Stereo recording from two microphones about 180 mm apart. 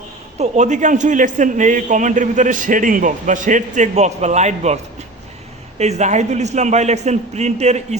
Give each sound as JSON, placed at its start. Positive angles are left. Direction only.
{"t": 0.3, "sound": "a man's voice", "side_deg": -40}
{"t": 5.8, "sound": "a man's voice", "side_deg": -40}